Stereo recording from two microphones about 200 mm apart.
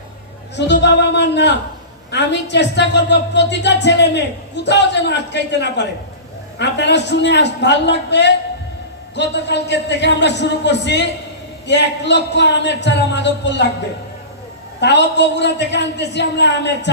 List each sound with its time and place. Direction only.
0.5 s a woman's voice: 60° left (ahead or behind)
14.8 s a woman's voice: 60° left (ahead or behind)